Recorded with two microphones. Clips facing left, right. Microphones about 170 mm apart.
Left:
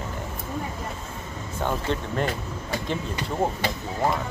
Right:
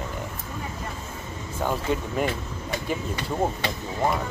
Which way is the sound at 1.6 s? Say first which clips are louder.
Right 1 dB; 10° right (ahead or behind).